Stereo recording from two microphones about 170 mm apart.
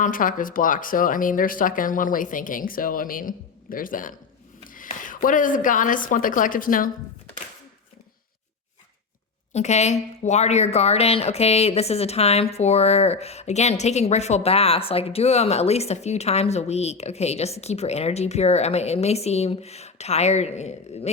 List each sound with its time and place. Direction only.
0.0 s a woman's voice: 55° left (ahead or behind)
9.5 s a woman's voice: 40° left (ahead or behind)